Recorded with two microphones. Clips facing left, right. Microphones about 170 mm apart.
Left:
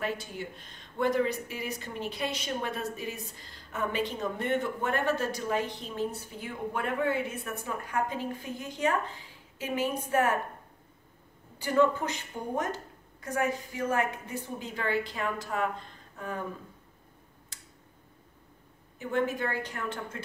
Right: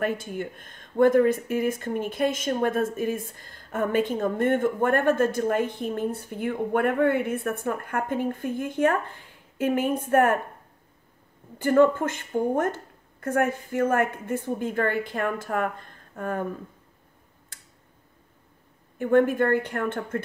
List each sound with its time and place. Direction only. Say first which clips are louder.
0.0 s speech: right 6 dB; 55° right (ahead or behind)
11.5 s speech: right 6 dB; 50° right (ahead or behind)
18.9 s speech: right 10 dB; 55° right (ahead or behind)